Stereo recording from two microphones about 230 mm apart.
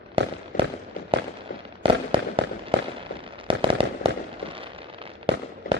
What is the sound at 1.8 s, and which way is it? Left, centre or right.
Fireworks, right.